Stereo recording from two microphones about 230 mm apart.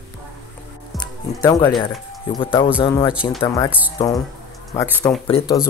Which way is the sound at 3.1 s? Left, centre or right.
Centre.